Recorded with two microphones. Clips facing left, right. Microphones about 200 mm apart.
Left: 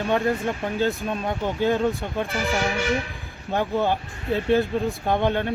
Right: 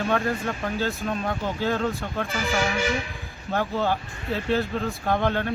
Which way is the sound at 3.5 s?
20° left (ahead or behind).